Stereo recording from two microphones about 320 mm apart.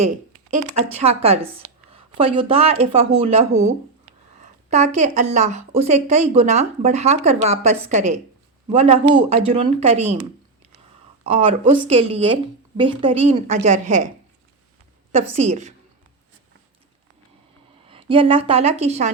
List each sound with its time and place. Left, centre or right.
0.9 s a woman's voice: centre
11.2 s speech: centre
15.1 s a woman's voice: centre
17.8 s a woman's voice: centre